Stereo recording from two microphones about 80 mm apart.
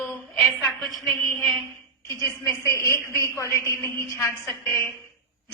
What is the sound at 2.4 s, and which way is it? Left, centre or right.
A man's voice, left.